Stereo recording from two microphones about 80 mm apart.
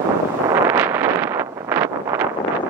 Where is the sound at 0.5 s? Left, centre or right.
Right.